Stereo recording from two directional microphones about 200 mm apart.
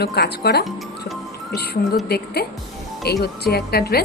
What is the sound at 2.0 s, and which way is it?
A woman's voice, 50° left (ahead or behind).